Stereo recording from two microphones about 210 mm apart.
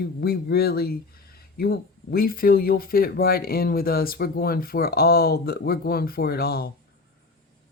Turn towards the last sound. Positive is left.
turn(degrees=45)  # may be behind; listen again after turning